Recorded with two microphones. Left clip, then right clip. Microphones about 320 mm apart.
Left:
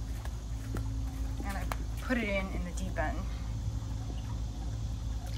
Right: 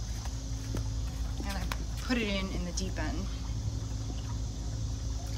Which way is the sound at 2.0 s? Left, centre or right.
Centre.